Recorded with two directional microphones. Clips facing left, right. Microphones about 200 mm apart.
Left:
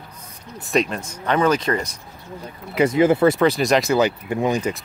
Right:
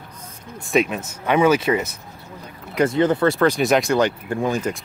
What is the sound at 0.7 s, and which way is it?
Speech, 5° right (ahead or behind).